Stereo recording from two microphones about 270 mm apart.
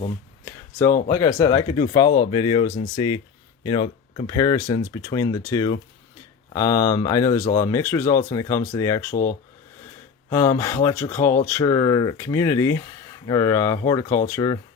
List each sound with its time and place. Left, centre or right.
0.4 s a sound: centre
1.1 s speech: centre
10.2 s speech: centre